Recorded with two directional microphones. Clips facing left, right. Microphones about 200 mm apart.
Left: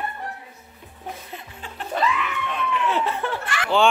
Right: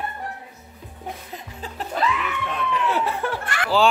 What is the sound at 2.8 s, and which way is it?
Laughter, 10° right (ahead or behind).